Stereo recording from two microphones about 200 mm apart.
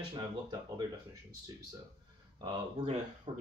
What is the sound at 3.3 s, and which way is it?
Speech, 25° right (ahead or behind).